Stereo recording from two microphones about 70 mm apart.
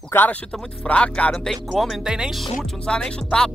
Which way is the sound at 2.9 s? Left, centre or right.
Centre.